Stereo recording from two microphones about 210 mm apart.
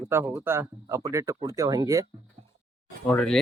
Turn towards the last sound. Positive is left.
turn(degrees=5)  # may be behind; listen again after turning